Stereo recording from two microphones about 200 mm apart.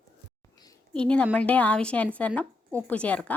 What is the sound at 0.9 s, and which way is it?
A woman's voice, 5° left (ahead or behind).